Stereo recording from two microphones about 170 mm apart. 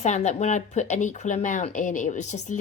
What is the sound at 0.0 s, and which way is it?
Speech, 45° left (ahead or behind).